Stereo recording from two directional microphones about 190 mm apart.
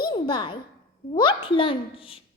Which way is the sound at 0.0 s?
25° left (ahead or behind).